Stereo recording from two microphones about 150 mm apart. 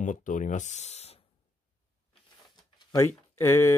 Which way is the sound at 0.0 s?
55° left (ahead or behind).